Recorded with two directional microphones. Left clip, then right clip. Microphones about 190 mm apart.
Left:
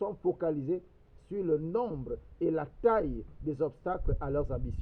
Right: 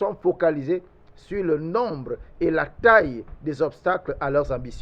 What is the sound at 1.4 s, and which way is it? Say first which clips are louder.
Speech: right 7 dB; 35° right (ahead or behind).